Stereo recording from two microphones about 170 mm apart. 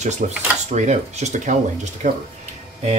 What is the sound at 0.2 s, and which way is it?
Speech, 45° right (ahead or behind).